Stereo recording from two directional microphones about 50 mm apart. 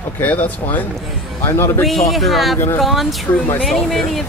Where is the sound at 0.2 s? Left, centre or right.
Left.